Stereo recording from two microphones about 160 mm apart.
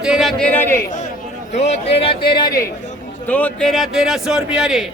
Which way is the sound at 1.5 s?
45° left (ahead or behind).